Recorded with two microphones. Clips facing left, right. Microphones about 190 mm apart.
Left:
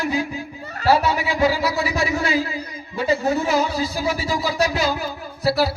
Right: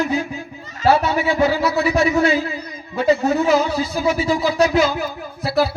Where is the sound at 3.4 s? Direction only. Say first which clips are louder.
Right 3 dB; 55° right (ahead or behind).